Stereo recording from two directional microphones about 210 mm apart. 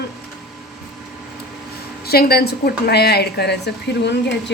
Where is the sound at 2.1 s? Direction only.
45° left (ahead or behind).